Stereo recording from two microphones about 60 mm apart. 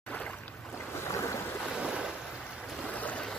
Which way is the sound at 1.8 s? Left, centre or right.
Centre.